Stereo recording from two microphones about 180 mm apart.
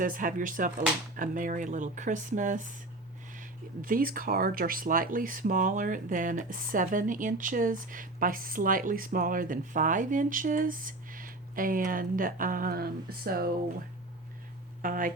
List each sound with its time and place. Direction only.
0.0 s speech: 50° right (ahead or behind)
14.8 s speech: 50° right (ahead or behind)